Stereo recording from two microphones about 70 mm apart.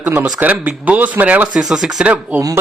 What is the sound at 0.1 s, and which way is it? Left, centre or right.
Speech, right.